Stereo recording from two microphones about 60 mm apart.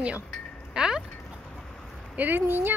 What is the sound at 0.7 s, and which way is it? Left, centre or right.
Wind chime, centre.